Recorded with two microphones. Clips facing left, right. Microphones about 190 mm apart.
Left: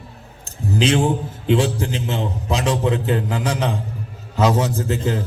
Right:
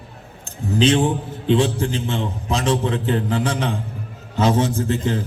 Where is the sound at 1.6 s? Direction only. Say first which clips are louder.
Right 1 dB; 35° left (ahead or behind).